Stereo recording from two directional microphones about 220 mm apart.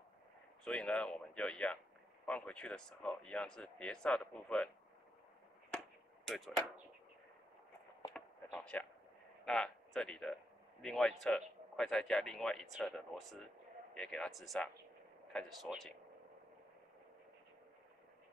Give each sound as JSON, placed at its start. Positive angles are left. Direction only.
{"t": 0.7, "sound": "speech", "side_deg": 5}
{"t": 5.7, "sound": "chop", "side_deg": 0}
{"t": 8.1, "sound": "a sound", "side_deg": 5}
{"t": 9.4, "sound": "speech", "side_deg": 0}